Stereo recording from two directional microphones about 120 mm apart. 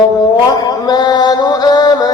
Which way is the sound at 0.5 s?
35° left (ahead or behind).